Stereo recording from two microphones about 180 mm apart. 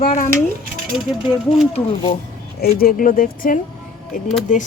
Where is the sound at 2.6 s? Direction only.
55° left (ahead or behind).